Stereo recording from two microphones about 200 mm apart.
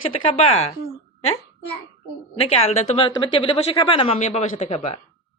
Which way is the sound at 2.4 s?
30° left (ahead or behind).